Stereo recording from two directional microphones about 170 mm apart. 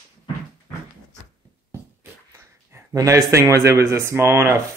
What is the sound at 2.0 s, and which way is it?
Speech, 15° right (ahead or behind).